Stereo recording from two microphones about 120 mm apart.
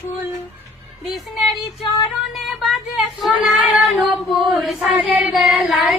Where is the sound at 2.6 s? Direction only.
Centre (ahead or behind).